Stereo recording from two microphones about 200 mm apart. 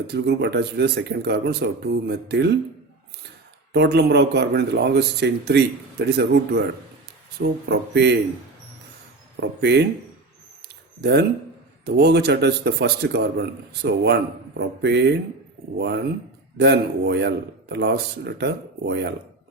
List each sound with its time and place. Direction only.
0.1 s speech: 55° right (ahead or behind)
9.4 s speech: 60° right (ahead or behind)
11.0 s speech: 55° right (ahead or behind)
16.6 s speech: 55° right (ahead or behind)